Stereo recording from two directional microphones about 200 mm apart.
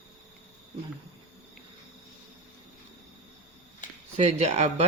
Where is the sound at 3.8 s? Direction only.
40° left (ahead or behind).